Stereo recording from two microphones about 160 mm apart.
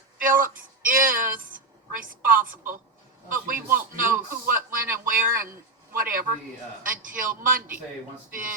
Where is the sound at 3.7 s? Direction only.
60° right (ahead or behind).